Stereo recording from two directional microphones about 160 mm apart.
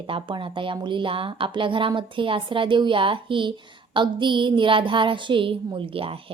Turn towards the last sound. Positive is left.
turn(degrees=-35)  # may be behind; listen again after turning